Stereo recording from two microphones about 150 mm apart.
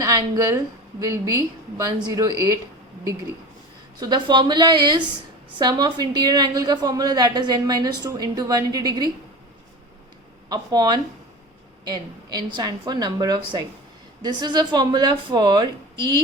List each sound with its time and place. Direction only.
0.0 s a woman's voice: 25° right (ahead or behind)
4.0 s a woman's voice: 30° right (ahead or behind)
10.5 s a woman's voice: 25° right (ahead or behind)